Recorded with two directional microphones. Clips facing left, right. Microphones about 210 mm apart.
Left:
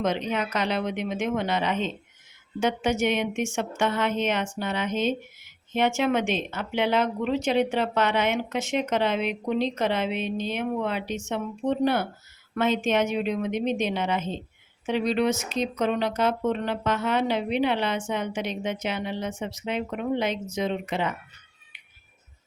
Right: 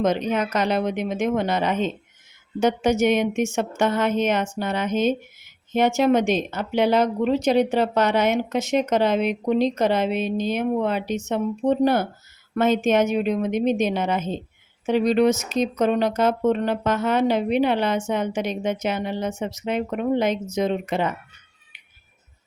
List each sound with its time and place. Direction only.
0.0 s speech: 45° right (ahead or behind)